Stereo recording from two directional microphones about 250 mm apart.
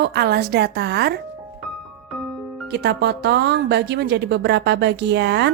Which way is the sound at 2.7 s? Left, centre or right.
Right.